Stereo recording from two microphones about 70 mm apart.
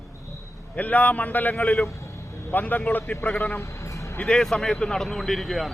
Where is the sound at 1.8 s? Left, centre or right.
Left.